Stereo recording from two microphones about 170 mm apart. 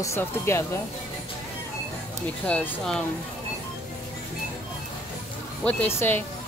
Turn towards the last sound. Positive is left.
turn(degrees=15)  # may be behind; listen again after turning